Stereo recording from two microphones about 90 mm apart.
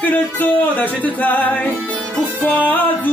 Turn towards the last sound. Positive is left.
turn(degrees=20)  # may be behind; listen again after turning